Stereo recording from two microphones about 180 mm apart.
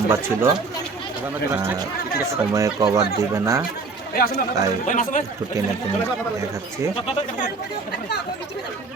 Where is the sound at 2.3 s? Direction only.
20° right (ahead or behind).